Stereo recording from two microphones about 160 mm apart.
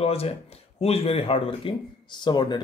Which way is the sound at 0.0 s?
40° left (ahead or behind).